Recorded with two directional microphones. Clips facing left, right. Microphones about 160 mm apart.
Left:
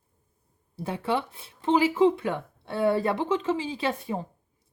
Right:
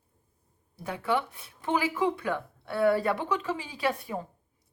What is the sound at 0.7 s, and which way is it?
A woman's voice, 30° left (ahead or behind).